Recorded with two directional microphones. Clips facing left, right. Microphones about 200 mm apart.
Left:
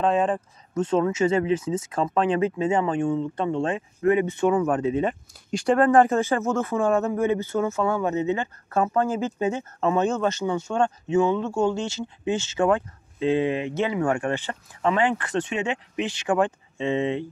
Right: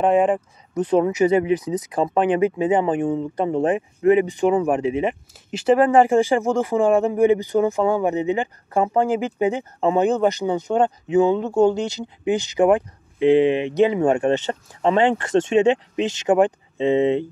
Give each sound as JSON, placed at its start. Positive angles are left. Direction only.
{"t": 0.0, "sound": "speech", "side_deg": -15}
{"t": 16.3, "sound": "speech", "side_deg": -20}